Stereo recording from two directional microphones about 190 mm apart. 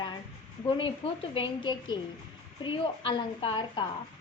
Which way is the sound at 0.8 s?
30° left (ahead or behind).